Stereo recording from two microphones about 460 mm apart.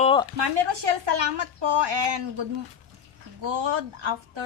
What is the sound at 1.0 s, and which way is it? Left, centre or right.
A woman's voice, right.